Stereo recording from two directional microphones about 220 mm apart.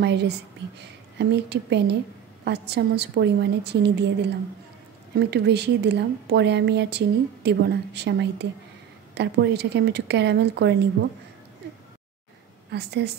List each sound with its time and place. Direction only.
0.0 s a woman's voice: 50° right (ahead or behind)
12.7 s a woman's voice: 50° right (ahead or behind)